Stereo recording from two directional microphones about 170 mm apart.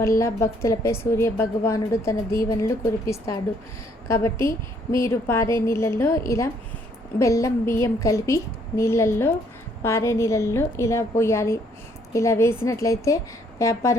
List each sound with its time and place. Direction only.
0.2 s a woman's voice: 15° left (ahead or behind)